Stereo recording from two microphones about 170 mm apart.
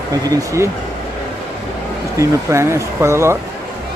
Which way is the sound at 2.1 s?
15° right (ahead or behind).